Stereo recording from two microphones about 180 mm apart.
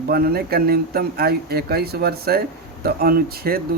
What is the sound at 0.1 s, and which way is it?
Speech, 60° right (ahead or behind).